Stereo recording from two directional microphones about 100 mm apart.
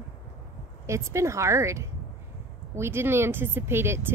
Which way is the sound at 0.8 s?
30° right (ahead or behind).